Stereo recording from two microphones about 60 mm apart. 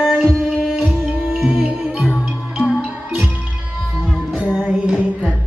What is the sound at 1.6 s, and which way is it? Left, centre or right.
Music, right.